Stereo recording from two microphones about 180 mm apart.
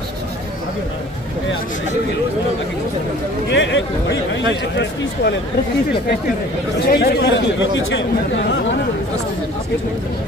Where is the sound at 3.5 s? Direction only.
90° left.